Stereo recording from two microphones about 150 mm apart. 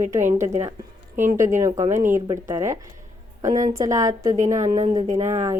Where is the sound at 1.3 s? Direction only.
20° right (ahead or behind).